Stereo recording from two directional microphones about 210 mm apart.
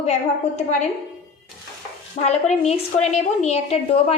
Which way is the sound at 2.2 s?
30° left (ahead or behind).